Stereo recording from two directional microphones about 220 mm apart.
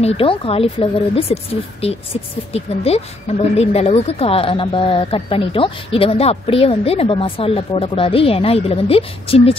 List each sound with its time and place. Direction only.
0.0 s a woman's voice: 25° left (ahead or behind)